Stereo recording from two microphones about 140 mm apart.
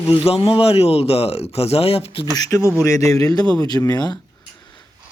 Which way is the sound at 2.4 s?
20° left (ahead or behind).